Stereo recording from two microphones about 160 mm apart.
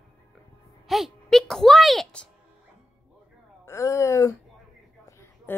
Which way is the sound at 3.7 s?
20° left (ahead or behind).